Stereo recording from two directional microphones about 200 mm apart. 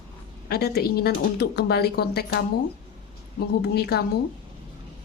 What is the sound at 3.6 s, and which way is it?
Speech, 50° left (ahead or behind).